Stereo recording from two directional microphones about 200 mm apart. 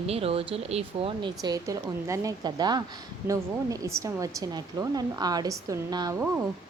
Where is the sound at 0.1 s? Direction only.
30° right (ahead or behind).